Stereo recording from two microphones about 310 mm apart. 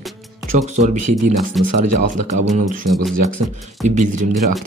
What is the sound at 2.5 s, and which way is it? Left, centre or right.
Speech, right.